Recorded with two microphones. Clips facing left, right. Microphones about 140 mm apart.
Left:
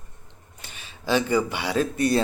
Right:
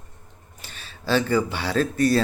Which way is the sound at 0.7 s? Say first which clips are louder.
Right 1 dB; 15° left (ahead or behind).